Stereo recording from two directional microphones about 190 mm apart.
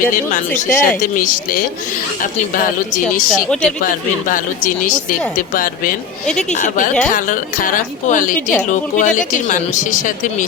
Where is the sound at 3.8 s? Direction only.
45° left (ahead or behind).